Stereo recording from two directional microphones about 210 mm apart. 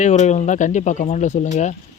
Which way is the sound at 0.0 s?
35° left (ahead or behind).